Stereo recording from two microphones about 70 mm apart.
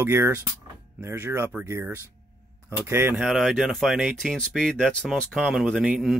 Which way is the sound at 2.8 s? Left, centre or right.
Right.